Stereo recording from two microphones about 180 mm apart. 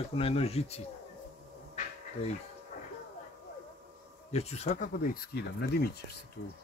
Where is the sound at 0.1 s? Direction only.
35° left (ahead or behind).